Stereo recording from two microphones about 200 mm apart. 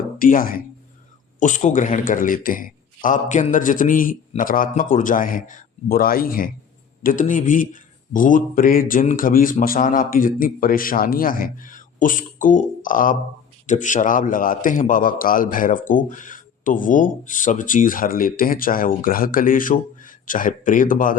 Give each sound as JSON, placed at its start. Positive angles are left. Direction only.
{"t": 0.2, "sound": "a man's voice", "side_deg": 45}